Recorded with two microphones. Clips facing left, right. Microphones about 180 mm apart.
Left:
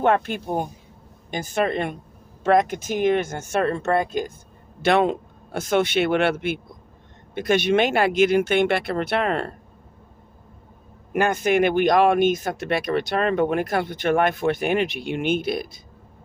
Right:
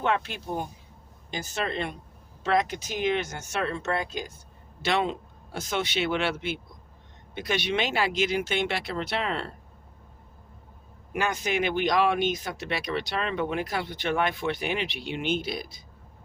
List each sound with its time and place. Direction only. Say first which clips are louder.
0.0 s speech: left 7 dB; 50° left (ahead or behind)
11.1 s speech: left 8 dB; 55° left (ahead or behind)